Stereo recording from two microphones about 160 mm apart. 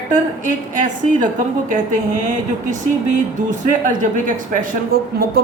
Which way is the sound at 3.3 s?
55° right (ahead or behind).